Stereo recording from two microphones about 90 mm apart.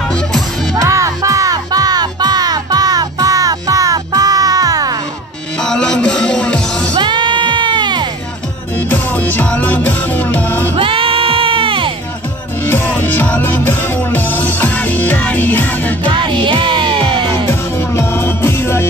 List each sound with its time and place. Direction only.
0.7 s music: 35° right (ahead or behind)
5.6 s music: 10° left (ahead or behind)
7.0 s sheep: 60° right (ahead or behind)
8.7 s music: 20° left (ahead or behind)
10.8 s music: 85° right
12.6 s music: 25° left (ahead or behind)
16.4 s music: 65° right (ahead or behind)
17.5 s music: 25° left (ahead or behind)